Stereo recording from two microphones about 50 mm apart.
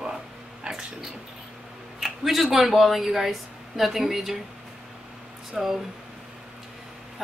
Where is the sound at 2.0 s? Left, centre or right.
Centre.